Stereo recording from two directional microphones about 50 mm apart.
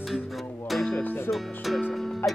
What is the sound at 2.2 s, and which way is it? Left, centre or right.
Music, left.